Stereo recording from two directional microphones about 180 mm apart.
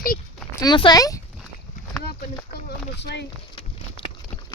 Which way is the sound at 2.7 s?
70° left (ahead or behind).